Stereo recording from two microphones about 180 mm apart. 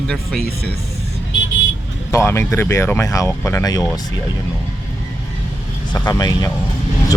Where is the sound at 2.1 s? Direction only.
15° left (ahead or behind).